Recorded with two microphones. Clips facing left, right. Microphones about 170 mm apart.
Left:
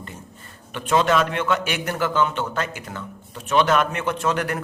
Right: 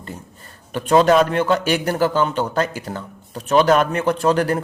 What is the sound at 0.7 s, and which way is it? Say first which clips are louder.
A man's voice: right 5 dB; 40° right (ahead or behind).